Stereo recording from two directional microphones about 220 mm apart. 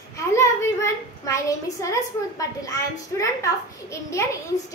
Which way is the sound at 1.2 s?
15° left (ahead or behind).